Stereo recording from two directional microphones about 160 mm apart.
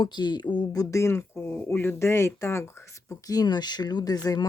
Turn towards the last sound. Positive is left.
turn(degrees=25)  # may be behind; listen again after turning